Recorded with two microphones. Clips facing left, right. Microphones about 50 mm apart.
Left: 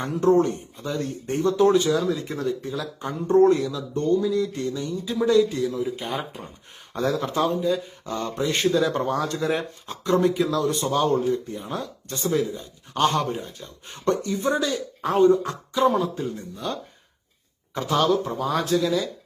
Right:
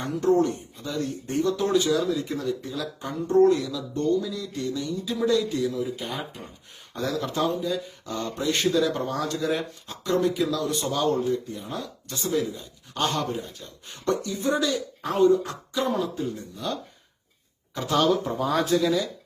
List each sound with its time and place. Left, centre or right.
0.0 s speech: left
17.8 s speech: centre